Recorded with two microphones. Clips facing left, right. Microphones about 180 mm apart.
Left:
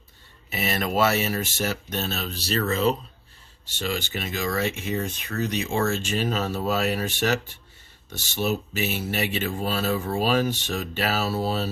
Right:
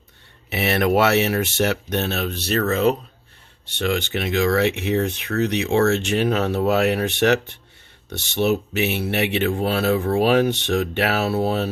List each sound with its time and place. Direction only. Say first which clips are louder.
0.5 s speech: right 7 dB; 70° right (ahead or behind)